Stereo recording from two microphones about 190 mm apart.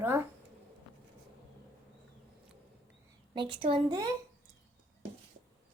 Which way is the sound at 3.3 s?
25° right (ahead or behind).